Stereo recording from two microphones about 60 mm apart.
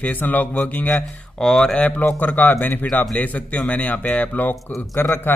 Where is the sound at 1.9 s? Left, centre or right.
Left.